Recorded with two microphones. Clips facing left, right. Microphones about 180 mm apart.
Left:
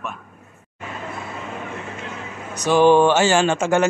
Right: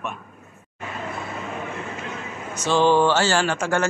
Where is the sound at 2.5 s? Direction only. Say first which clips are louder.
Left 4 dB; 15° left (ahead or behind).